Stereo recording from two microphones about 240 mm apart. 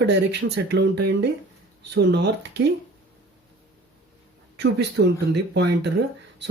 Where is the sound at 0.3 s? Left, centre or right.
Right.